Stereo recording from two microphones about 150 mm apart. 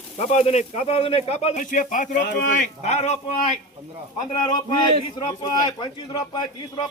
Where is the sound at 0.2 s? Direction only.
45° left (ahead or behind).